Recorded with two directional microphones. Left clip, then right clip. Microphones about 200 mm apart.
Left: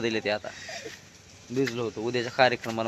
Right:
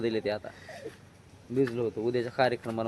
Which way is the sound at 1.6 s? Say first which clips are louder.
Even; 5° right (ahead or behind).